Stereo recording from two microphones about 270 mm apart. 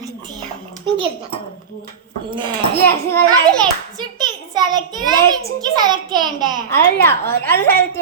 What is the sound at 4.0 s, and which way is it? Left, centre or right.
A child's voice, centre.